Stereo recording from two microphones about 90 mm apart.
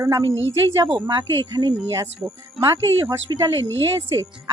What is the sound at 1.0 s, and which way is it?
Speech, 55° right (ahead or behind).